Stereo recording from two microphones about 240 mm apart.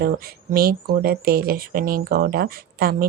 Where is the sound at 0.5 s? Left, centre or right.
Right.